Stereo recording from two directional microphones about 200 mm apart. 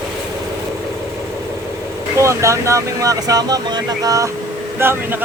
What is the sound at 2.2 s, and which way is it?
Speech, 15° right (ahead or behind).